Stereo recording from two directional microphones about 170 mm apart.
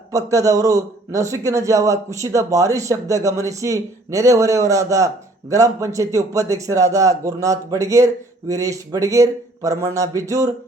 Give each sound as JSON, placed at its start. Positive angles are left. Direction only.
{"t": 0.1, "sound": "a man's voice", "side_deg": -20}